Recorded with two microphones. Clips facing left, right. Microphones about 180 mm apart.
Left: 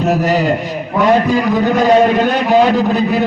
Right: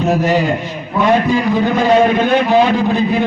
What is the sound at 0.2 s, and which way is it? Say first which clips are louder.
A man's voice: left 1 dB; 40° left (ahead or behind).